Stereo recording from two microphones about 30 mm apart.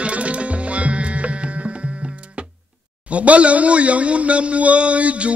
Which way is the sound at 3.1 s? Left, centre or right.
Right.